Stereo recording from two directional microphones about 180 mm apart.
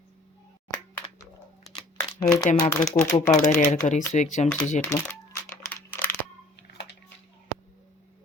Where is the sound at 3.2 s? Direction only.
45° left (ahead or behind).